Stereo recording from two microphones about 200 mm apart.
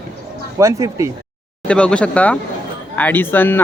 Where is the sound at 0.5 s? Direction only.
15° right (ahead or behind).